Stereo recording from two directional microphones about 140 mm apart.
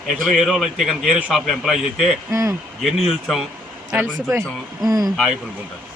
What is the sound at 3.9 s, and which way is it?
Speech, 20° right (ahead or behind).